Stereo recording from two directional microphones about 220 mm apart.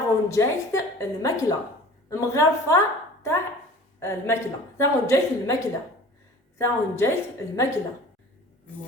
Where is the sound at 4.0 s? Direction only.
10° left (ahead or behind).